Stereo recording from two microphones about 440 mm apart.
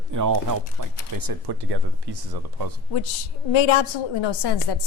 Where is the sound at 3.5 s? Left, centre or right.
Left.